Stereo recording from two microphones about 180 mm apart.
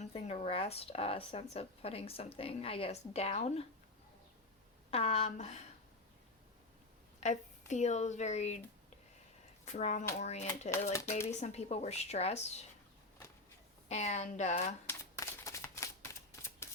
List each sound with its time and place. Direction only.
0.0 s speech: 35° left (ahead or behind)
4.9 s speech: 35° left (ahead or behind)
7.2 s speech: 40° left (ahead or behind)
9.7 s speech: 40° left (ahead or behind)
13.8 s speech: 40° left (ahead or behind)
14.8 s shuffling cards: 15° left (ahead or behind)